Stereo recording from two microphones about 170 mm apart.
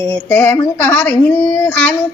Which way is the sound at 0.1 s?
10° left (ahead or behind).